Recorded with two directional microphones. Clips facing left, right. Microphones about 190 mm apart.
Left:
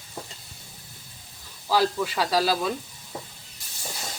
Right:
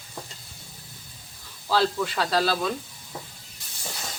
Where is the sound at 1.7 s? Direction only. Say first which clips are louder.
Even; 10° left (ahead or behind).